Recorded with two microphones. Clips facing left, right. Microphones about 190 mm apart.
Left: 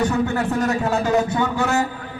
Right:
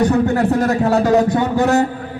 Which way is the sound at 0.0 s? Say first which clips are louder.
Right 6 dB; 35° right (ahead or behind).